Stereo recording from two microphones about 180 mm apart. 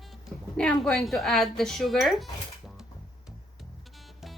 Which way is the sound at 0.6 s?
5° left (ahead or behind).